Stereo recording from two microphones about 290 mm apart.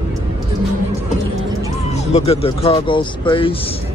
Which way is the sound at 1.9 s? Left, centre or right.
Left.